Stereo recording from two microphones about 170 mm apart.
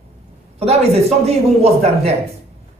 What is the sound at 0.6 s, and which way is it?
A man's voice, 35° right (ahead or behind).